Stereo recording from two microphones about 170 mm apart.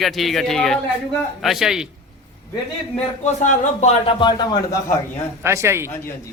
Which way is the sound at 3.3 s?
45° left (ahead or behind).